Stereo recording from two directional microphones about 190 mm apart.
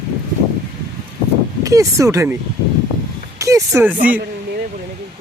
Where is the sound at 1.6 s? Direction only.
15° right (ahead or behind).